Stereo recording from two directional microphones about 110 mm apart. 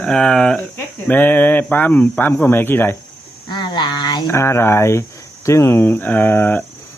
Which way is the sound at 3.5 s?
45° left (ahead or behind).